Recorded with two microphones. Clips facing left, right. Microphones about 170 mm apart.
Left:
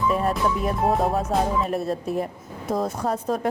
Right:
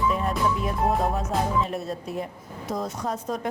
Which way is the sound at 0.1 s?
50° left (ahead or behind).